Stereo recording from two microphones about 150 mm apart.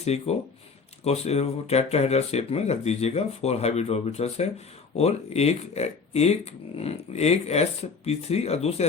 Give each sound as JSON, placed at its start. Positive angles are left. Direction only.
{"t": 0.0, "sound": "speech", "side_deg": 45}